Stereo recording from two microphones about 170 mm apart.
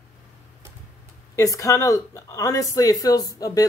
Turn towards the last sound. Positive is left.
turn(degrees=20)  # may be behind; listen again after turning